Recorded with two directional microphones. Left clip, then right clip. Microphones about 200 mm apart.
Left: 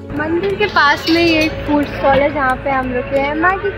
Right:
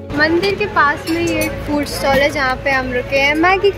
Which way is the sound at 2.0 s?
5° right (ahead or behind).